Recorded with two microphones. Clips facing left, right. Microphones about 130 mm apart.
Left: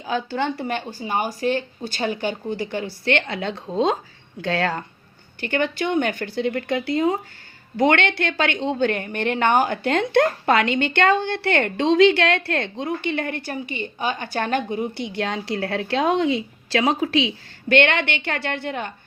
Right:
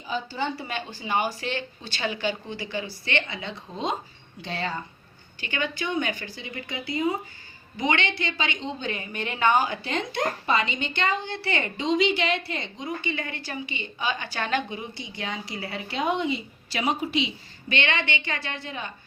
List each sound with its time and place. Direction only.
0.0 s a woman's voice: 80° left
0.9 s speech: 45° left (ahead or behind); by 3.9 s 70° left (ahead or behind)
4.4 s speech: 90° left
5.4 s a woman's voice: 55° left (ahead or behind)
15.1 s a woman's voice: 75° left (ahead or behind)